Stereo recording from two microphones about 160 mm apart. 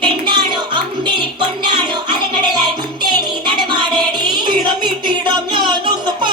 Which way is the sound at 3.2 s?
30° right (ahead or behind).